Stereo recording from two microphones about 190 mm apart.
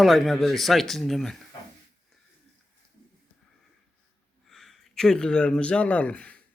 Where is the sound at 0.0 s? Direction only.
Centre (ahead or behind).